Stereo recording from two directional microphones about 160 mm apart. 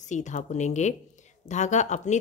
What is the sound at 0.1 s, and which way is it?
A woman's voice, 50° left (ahead or behind).